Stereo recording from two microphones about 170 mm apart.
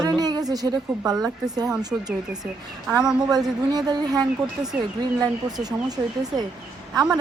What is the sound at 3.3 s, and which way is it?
Speech, 25° right (ahead or behind).